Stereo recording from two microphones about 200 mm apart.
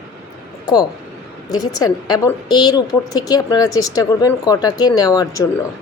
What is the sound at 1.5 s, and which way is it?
A woman's voice, 20° left (ahead or behind).